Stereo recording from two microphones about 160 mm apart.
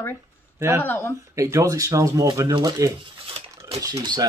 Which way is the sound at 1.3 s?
20° right (ahead or behind).